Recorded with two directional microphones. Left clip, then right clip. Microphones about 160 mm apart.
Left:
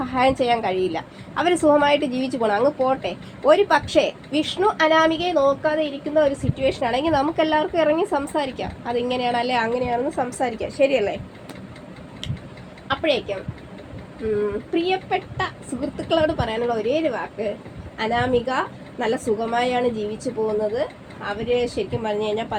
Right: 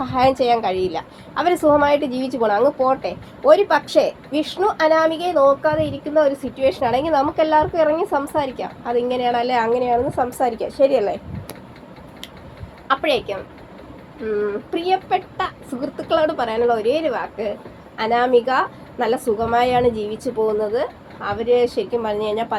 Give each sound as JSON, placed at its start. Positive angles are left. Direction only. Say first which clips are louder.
{"t": 0.0, "sound": "speech", "louder": "right 3 dB", "side_deg": 0}
{"t": 12.9, "sound": "a woman's voice", "louder": "right 3 dB", "side_deg": -5}
{"t": 20.1, "sound": "speech", "louder": "right 4 dB", "side_deg": -40}
{"t": 20.6, "sound": "speech", "louder": "right 2 dB", "side_deg": -5}